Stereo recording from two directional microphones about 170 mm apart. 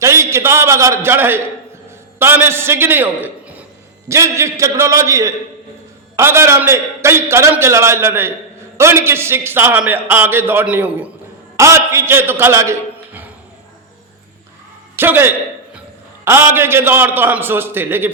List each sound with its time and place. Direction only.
0.0 s a man's voice: 15° right (ahead or behind)
14.9 s a sound: 10° right (ahead or behind)
16.2 s a man's voice: 15° right (ahead or behind)